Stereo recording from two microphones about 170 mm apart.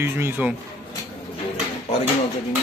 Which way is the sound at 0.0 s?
15° right (ahead or behind).